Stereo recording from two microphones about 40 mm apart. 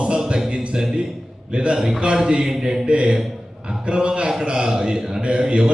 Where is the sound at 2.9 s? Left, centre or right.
Right.